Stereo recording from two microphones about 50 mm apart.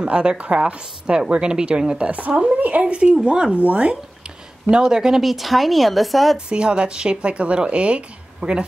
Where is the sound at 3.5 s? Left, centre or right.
Right.